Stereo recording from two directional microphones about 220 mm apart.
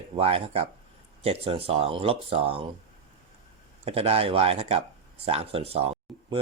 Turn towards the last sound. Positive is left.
turn(degrees=-25)  # may be behind; listen again after turning